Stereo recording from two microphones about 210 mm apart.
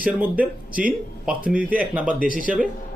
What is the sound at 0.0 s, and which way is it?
Speech, 5° right (ahead or behind).